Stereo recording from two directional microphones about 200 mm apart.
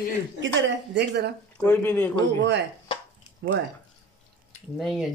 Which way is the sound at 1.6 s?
10° left (ahead or behind).